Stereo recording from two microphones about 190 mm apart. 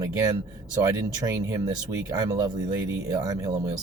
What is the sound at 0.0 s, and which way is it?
Speech, 15° right (ahead or behind).